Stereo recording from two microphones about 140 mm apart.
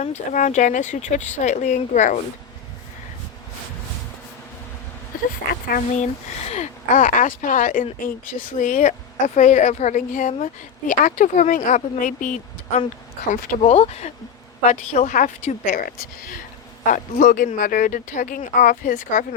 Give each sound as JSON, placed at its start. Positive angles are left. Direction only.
{"t": 0.0, "sound": "speech", "side_deg": 55}
{"t": 5.1, "sound": "a sound", "side_deg": 75}
{"t": 6.5, "sound": "a woman's voice", "side_deg": 60}
{"t": 13.6, "sound": "a woman's voice", "side_deg": 45}
{"t": 16.9, "sound": "a woman's voice", "side_deg": 70}